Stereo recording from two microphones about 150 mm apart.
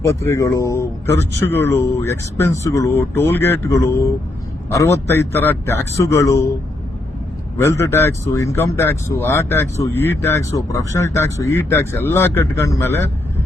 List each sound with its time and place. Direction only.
0.0 s speech: 20° left (ahead or behind)
7.6 s speech: 15° left (ahead or behind)